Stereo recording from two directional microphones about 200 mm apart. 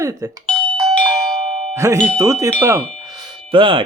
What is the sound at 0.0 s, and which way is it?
Speech, 15° right (ahead or behind).